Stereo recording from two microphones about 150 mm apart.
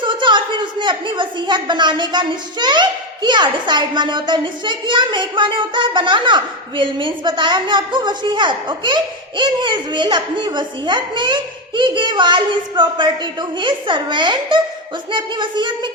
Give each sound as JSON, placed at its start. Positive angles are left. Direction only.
{"t": 0.0, "sound": "a woman's voice", "side_deg": -30}